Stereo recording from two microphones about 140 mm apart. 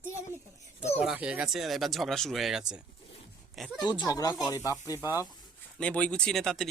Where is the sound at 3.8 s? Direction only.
30° left (ahead or behind).